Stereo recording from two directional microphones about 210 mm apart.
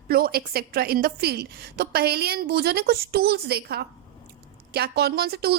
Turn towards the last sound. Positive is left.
turn(degrees=-50)  # may be behind; listen again after turning